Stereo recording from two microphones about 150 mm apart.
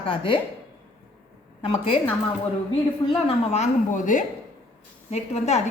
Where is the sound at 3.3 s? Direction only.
50° left (ahead or behind).